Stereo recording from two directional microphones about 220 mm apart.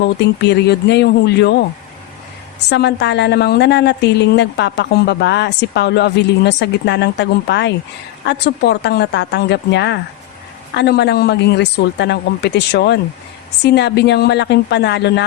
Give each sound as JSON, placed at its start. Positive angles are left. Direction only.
{"t": 0.0, "sound": "a woman's voice", "side_deg": 50}
{"t": 2.6, "sound": "a woman's voice", "side_deg": 50}